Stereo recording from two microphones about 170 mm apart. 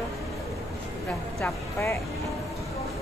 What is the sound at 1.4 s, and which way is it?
Speech, 15° left (ahead or behind).